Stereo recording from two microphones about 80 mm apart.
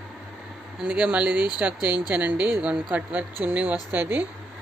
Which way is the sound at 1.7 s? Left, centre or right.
Left.